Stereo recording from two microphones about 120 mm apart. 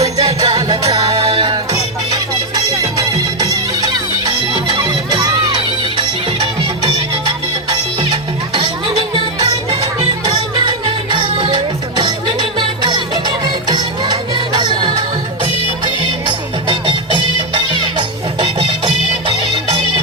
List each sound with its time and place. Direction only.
0.2 s music: 35° right (ahead or behind)
0.9 s music: 50° right (ahead or behind)
2.7 s music: 30° right (ahead or behind)
8.5 s music: 45° right (ahead or behind)
16.6 s music: 45° right (ahead or behind)